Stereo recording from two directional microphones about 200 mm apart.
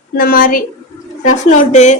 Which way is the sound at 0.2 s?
45° left (ahead or behind).